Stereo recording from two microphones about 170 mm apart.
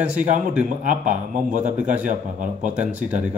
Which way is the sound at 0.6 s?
50° right (ahead or behind).